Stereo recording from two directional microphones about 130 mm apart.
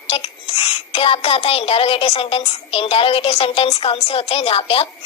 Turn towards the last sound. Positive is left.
turn(degrees=45)  # may be behind; listen again after turning